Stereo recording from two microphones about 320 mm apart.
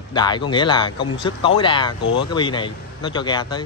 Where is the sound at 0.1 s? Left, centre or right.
Centre.